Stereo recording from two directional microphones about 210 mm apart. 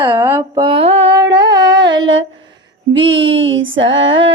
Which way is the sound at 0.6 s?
25° right (ahead or behind).